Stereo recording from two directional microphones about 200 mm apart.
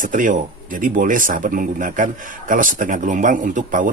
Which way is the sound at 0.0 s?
40° right (ahead or behind).